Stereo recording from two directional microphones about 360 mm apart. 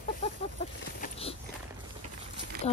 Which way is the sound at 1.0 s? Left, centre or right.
Centre.